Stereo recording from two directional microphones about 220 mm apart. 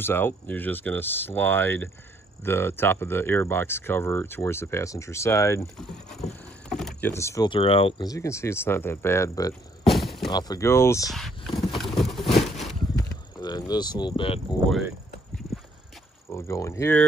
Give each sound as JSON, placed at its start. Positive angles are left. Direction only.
{"t": 0.0, "sound": "speech", "side_deg": 10}
{"t": 5.8, "sound": "mechanisms", "side_deg": 0}
{"t": 6.7, "sound": "speech", "side_deg": 0}
{"t": 9.8, "sound": "shatter", "side_deg": 0}
{"t": 10.3, "sound": "speech", "side_deg": 15}
{"t": 11.1, "sound": "a sound", "side_deg": 0}
{"t": 13.1, "sound": "a sound", "side_deg": 20}
{"t": 15.5, "sound": "clip-clop", "side_deg": 0}
{"t": 16.3, "sound": "speech", "side_deg": 15}